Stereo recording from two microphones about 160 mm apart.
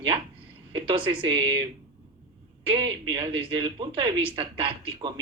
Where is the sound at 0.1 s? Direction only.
35° right (ahead or behind).